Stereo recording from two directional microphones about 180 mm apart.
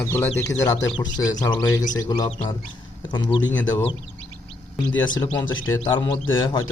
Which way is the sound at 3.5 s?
10° left (ahead or behind).